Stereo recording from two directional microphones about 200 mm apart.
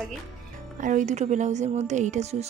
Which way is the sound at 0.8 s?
40° right (ahead or behind).